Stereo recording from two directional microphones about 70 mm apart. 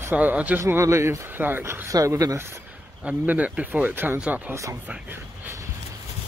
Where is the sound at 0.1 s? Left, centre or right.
Right.